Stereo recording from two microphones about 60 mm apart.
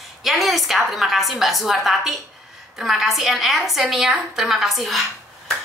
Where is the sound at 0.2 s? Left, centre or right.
Centre.